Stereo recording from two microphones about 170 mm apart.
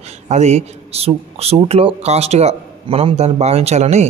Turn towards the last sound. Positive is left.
turn(degrees=-40)  # may be behind; listen again after turning